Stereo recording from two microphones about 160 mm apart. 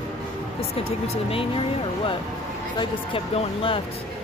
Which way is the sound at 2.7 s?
35° left (ahead or behind).